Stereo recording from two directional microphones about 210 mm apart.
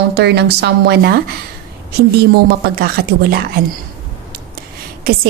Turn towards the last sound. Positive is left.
turn(degrees=-45)  # may be behind; listen again after turning